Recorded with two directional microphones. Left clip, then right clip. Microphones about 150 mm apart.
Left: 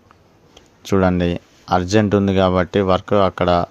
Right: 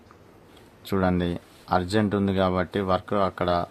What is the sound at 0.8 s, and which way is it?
Speech, 40° left (ahead or behind).